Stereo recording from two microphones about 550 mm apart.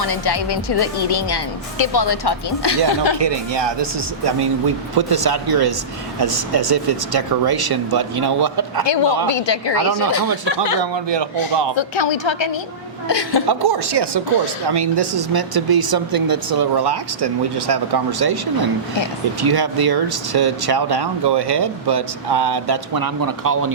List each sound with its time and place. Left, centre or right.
0.0 s speech: left
3.2 s speech: right
9.2 s speech: left
10.9 s speech: right
11.8 s speech: left
13.5 s speech: right